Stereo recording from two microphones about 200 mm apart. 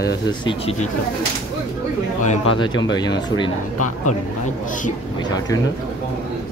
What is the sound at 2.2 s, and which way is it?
Speech, 25° left (ahead or behind).